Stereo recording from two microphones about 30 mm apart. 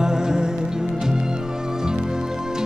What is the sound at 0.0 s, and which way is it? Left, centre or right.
Music, right.